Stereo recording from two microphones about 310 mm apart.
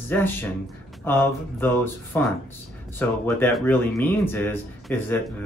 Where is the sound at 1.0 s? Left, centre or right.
Centre.